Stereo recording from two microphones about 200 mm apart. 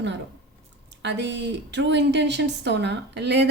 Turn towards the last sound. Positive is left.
turn(degrees=-60)  # may be behind; listen again after turning